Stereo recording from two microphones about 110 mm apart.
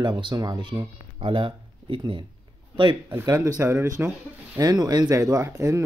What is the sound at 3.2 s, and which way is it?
Speech, 35° right (ahead or behind).